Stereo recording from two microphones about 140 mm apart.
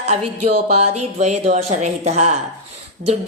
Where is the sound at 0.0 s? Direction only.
50° right (ahead or behind).